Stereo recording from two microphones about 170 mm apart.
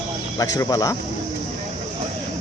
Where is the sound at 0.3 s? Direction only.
20° left (ahead or behind).